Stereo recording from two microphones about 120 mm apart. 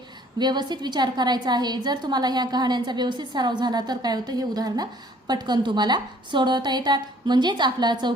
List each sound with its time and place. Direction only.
0.3 s a woman's voice: 35° right (ahead or behind)